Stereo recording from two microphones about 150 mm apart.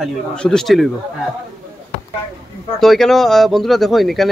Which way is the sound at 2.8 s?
Centre (ahead or behind).